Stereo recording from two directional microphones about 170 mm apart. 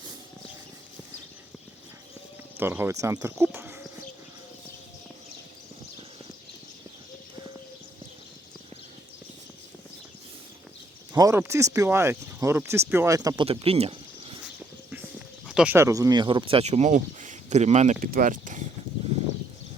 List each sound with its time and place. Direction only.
2.6 s speech: 15° right (ahead or behind)
11.1 s speech: 20° right (ahead or behind)
13.4 s speech: 35° right (ahead or behind)
14.4 s a sound: 10° right (ahead or behind)
15.4 s speech: 5° right (ahead or behind); by 17.9 s 40° right (ahead or behind)
18.0 s speech: 55° right (ahead or behind)